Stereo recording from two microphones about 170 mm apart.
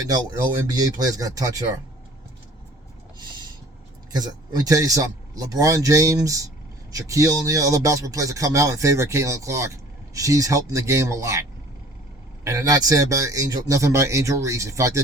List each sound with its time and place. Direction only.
0.0 s a man's voice: 20° right (ahead or behind)
4.1 s a man's voice: 20° right (ahead or behind)
12.5 s a man's voice: 20° right (ahead or behind)